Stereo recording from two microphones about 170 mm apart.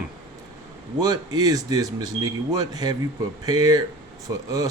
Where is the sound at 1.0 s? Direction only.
25° right (ahead or behind).